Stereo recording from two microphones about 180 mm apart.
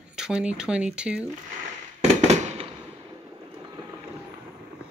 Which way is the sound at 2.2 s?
40° right (ahead or behind).